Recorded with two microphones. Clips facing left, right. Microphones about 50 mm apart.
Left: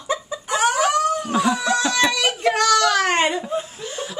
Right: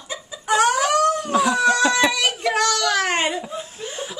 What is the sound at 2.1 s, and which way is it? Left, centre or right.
A child's voice, centre.